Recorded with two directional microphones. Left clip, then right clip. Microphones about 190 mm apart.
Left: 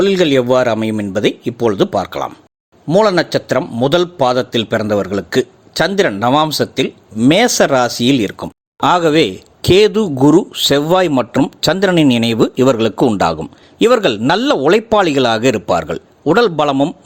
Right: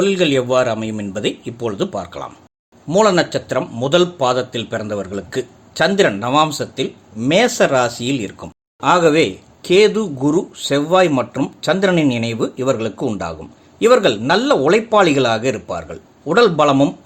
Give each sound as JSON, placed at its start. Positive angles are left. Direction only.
{"t": 0.0, "sound": "a man's voice", "side_deg": 35}